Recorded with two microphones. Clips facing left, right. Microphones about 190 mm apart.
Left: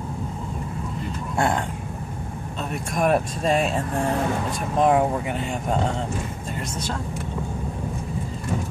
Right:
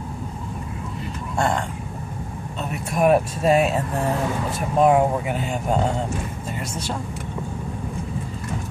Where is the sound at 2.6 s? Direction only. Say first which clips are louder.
Right 4 dB; 5° right (ahead or behind).